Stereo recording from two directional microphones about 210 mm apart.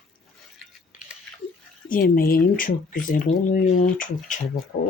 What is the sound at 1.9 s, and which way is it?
Speech, 45° left (ahead or behind).